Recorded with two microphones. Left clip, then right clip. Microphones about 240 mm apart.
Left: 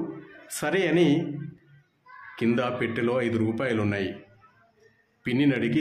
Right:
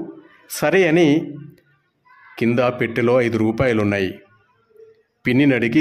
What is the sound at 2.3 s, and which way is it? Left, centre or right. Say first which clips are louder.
Speech: right 8 dB; right.